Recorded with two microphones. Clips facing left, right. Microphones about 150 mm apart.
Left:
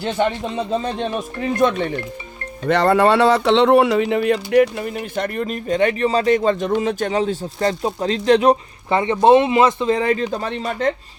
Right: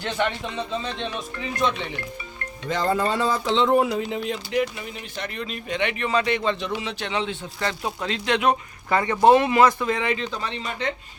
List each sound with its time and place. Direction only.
0.0 s speech: 30° left (ahead or behind)
0.5 s speech: 45° left (ahead or behind)
2.6 s speech: 70° left (ahead or behind); by 9.0 s 35° left (ahead or behind)
9.0 s speech: 20° left (ahead or behind)
10.0 s speech: 40° left (ahead or behind)